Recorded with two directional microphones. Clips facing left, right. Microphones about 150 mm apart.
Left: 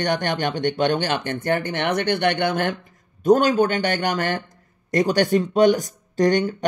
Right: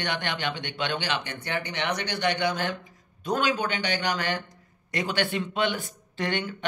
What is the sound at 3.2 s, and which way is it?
Speech, 45° left (ahead or behind).